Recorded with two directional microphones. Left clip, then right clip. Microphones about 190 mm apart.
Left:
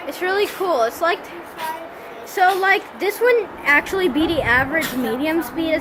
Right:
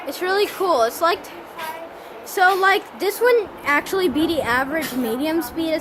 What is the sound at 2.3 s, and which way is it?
A woman's voice, 25° right (ahead or behind).